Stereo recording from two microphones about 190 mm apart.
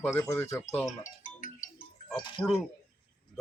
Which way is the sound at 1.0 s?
45° left (ahead or behind).